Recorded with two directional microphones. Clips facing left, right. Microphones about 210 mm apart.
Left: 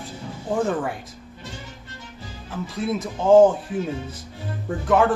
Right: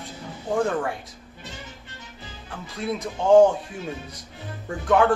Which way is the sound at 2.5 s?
Centre (ahead or behind).